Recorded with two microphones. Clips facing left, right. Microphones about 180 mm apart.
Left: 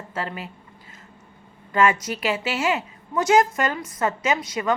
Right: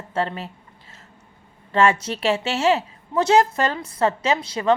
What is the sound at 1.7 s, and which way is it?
A woman's voice, 30° right (ahead or behind).